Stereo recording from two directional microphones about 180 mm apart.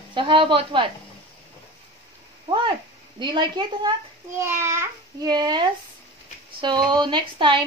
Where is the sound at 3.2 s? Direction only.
25° right (ahead or behind).